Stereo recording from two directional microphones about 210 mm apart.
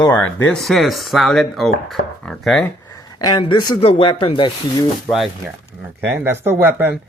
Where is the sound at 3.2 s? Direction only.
20° left (ahead or behind).